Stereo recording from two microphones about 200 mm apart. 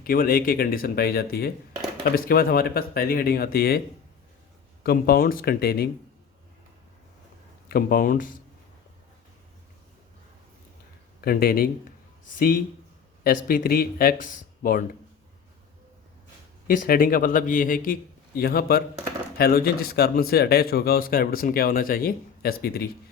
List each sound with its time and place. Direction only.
0.0 s speech: 45° left (ahead or behind)
4.8 s speech: 50° left (ahead or behind)
7.7 s speech: 45° left (ahead or behind)
11.2 s a man's voice: 50° left (ahead or behind)
13.2 s speech: 45° left (ahead or behind)
16.6 s speech: 45° left (ahead or behind)